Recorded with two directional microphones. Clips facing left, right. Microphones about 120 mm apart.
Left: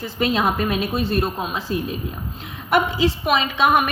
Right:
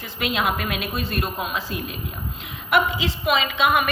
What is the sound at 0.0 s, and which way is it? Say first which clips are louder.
A woman's voice: left 4 dB; 35° left (ahead or behind).